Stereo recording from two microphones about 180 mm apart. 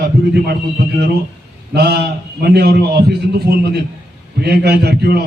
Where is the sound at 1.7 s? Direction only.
65° right (ahead or behind).